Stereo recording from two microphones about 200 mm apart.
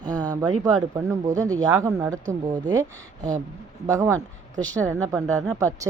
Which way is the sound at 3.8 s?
15° right (ahead or behind).